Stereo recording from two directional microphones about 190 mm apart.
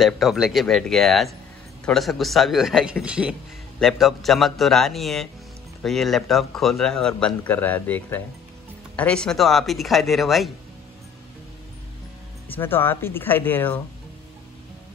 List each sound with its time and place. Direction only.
0.0 s speech: centre (ahead or behind)
12.4 s speech: 10° left (ahead or behind)